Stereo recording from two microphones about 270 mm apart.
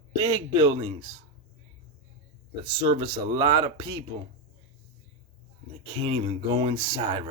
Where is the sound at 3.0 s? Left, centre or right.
Centre.